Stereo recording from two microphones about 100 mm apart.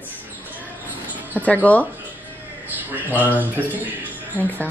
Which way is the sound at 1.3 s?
15° left (ahead or behind).